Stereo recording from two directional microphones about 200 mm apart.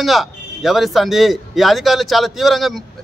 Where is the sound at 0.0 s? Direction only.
Centre (ahead or behind).